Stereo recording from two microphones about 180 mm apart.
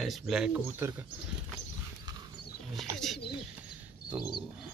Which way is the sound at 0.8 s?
15° right (ahead or behind).